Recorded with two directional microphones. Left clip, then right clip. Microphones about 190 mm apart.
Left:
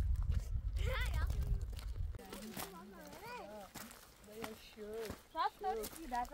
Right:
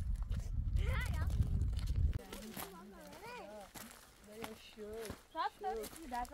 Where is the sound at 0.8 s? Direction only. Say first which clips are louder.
Left 2 dB; 60° left (ahead or behind).